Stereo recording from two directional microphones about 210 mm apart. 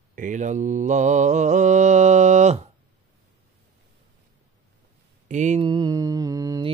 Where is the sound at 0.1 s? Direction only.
40° right (ahead or behind).